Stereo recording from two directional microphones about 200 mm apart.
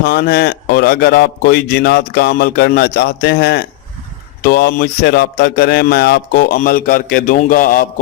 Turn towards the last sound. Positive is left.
turn(degrees=45)  # may be behind; listen again after turning